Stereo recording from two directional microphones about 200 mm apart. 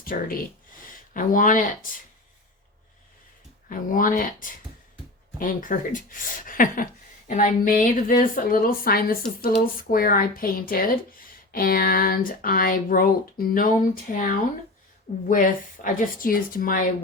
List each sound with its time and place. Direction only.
0.0 s speech: 45° left (ahead or behind)
3.7 s speech: 45° left (ahead or behind)